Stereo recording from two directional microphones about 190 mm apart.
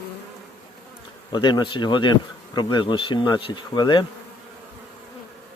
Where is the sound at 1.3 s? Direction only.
25° left (ahead or behind).